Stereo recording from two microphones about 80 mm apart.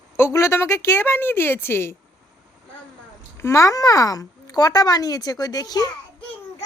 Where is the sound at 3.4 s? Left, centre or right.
Left.